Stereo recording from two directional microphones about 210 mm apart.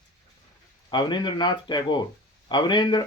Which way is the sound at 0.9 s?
20° left (ahead or behind).